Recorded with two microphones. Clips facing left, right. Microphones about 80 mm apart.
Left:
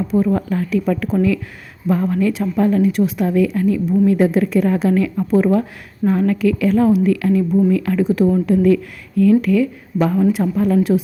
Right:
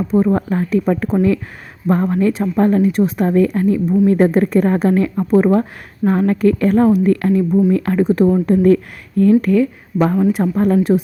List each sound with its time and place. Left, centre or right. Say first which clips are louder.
0.1 s a woman's voice: right 3 dB; right